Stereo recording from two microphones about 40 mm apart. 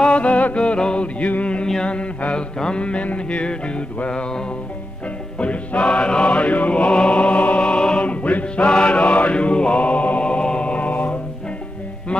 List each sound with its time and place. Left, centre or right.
0.0 s music: left
0.6 s music: left
1.0 s music: left
5.4 s music: left
6.9 s music: left
8.6 s mantra: left
10.2 s music: left